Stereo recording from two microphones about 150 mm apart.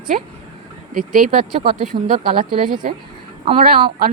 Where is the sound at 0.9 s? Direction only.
65° right (ahead or behind).